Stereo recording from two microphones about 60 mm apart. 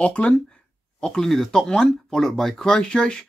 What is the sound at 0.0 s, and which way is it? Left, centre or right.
Speech, centre.